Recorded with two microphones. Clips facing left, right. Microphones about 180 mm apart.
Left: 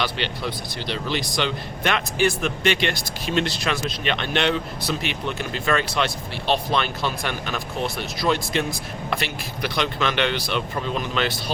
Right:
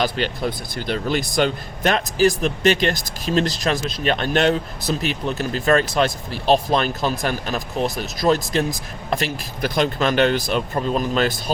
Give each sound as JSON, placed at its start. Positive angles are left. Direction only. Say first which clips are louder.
{"t": 0.0, "sound": "speech", "louder": "right 5 dB", "side_deg": -45}